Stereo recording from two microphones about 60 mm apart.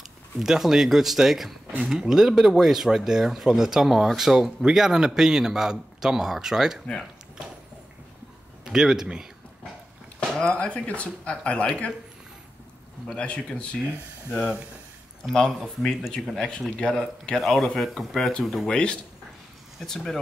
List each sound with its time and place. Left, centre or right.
0.4 s speech: centre
8.6 s speech: centre
10.3 s speech: centre
13.1 s speech: centre
14.3 s speech: centre
15.6 s speech: centre
17.4 s speech: centre
18.7 s speech: centre
19.8 s speech: centre